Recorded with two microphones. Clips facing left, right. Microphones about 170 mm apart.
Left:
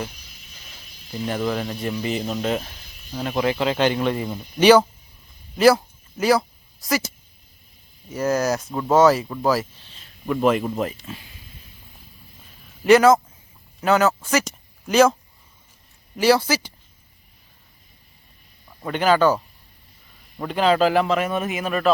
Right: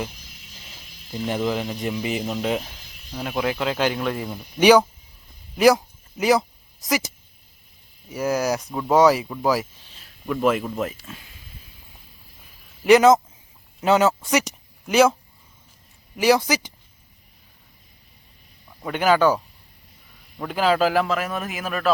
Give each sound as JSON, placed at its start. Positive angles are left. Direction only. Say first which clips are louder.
{"t": 1.5, "sound": "speech", "louder": "even", "side_deg": -15}
{"t": 2.6, "sound": "a man's voice", "louder": "even", "side_deg": 0}
{"t": 4.6, "sound": "speech", "louder": "left 1 dB", "side_deg": -10}
{"t": 5.5, "sound": "a sound", "louder": "left 1 dB", "side_deg": -15}
{"t": 8.1, "sound": "a man's voice", "louder": "left 1 dB", "side_deg": -10}
{"t": 12.8, "sound": "speech", "louder": "even", "side_deg": -15}
{"t": 16.1, "sound": "speech", "louder": "left 1 dB", "side_deg": -15}
{"t": 18.8, "sound": "speech", "louder": "even", "side_deg": -10}
{"t": 20.4, "sound": "a man's voice", "louder": "left 2 dB", "side_deg": -5}